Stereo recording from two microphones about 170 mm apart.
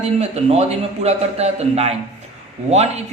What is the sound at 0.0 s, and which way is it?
A man's voice, 40° right (ahead or behind).